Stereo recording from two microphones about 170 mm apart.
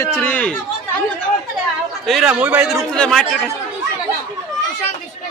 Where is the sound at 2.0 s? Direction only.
Centre (ahead or behind).